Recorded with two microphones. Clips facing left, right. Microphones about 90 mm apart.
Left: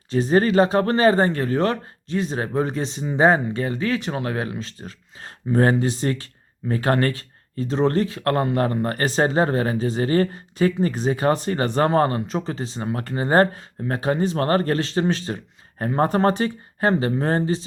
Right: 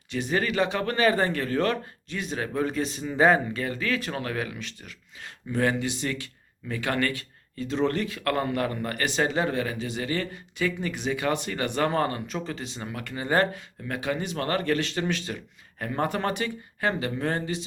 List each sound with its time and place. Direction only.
0.1 s speech: 35° left (ahead or behind)